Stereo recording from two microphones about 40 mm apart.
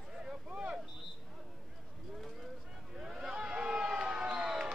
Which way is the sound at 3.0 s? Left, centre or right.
Centre.